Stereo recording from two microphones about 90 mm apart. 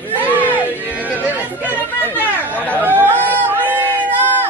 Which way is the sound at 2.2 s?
20° left (ahead or behind).